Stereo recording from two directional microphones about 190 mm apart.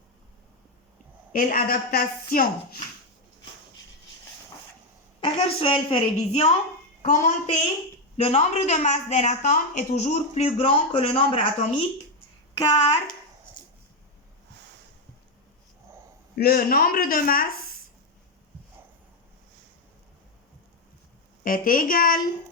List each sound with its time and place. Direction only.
1.3 s speech: 45° left (ahead or behind)
5.2 s a woman's voice: 30° left (ahead or behind)
12.5 s a woman's voice: 20° left (ahead or behind)
16.3 s speech: 55° left (ahead or behind)
21.4 s speech: 50° left (ahead or behind)